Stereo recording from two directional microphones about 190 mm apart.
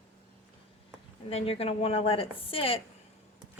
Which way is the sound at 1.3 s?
30° left (ahead or behind).